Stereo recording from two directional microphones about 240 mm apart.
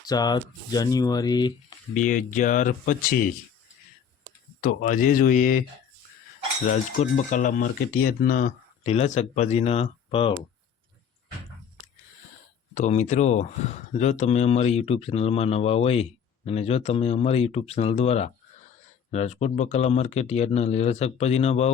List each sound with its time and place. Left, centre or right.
0.0 s speech: centre
1.9 s speech: left
4.6 s speech: left
6.7 s speech: left
12.7 s speech: left